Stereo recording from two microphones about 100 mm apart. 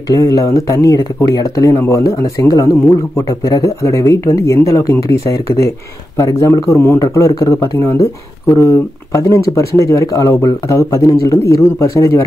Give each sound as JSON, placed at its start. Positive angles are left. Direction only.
{"t": 0.1, "sound": "speech", "side_deg": 35}